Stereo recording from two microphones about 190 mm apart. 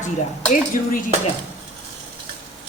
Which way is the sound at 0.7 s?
45° left (ahead or behind).